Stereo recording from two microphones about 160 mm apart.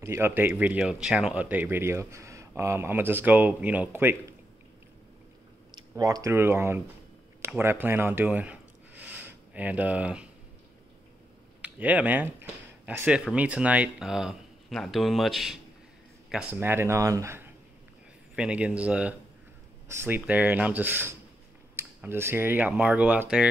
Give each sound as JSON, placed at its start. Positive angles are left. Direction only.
{"t": 0.0, "sound": "speech", "side_deg": -15}
{"t": 5.9, "sound": "speech", "side_deg": -25}
{"t": 11.6, "sound": "speech", "side_deg": -10}
{"t": 18.3, "sound": "speech", "side_deg": -5}